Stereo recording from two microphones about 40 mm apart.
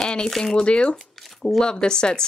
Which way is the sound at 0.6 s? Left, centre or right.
Left.